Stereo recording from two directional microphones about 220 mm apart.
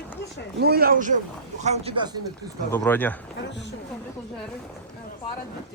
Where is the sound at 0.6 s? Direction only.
45° right (ahead or behind).